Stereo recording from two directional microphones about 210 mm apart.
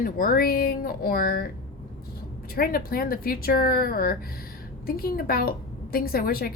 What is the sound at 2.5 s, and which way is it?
A woman's voice, 45° left (ahead or behind).